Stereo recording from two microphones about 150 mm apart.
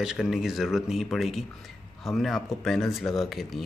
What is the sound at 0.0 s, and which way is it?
Speech, 5° right (ahead or behind).